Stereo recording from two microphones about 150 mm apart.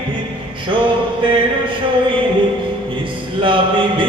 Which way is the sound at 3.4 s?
35° right (ahead or behind).